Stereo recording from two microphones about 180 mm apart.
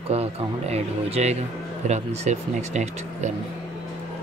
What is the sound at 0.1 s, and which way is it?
Speech, 35° right (ahead or behind).